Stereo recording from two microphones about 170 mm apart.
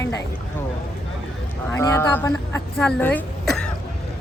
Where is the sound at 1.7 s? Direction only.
20° left (ahead or behind).